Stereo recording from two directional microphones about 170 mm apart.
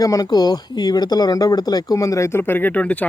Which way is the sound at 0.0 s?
20° left (ahead or behind).